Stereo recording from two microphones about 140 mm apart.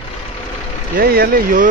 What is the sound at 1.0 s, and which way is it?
Speech, 80° right.